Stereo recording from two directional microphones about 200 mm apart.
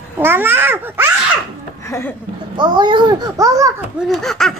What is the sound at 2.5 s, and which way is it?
A child's voice, 20° right (ahead or behind).